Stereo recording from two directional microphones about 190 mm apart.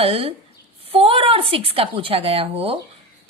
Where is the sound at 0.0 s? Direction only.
30° right (ahead or behind).